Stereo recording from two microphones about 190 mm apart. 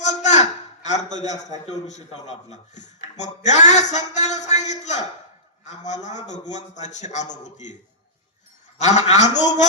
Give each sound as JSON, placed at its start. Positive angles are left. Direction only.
{"t": 0.0, "sound": "a man's voice", "side_deg": 40}
{"t": 8.8, "sound": "a man's voice", "side_deg": 35}